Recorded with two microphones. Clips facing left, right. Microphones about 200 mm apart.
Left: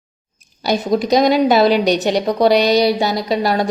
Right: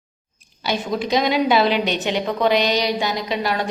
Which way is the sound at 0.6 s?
40° left (ahead or behind).